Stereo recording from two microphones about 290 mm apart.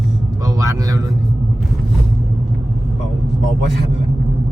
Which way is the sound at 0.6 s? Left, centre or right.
Centre.